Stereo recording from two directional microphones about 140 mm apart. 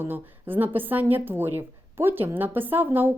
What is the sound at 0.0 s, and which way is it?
A woman's voice, 15° right (ahead or behind).